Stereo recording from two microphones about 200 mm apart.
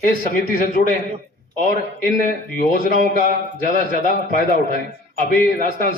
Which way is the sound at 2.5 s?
45° left (ahead or behind).